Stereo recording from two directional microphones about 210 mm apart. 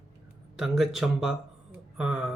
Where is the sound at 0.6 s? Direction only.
Centre (ahead or behind).